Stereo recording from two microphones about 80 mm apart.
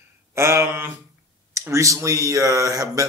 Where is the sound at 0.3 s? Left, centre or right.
Right.